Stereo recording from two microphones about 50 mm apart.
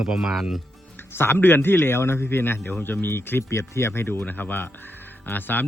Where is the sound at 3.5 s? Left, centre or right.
Left.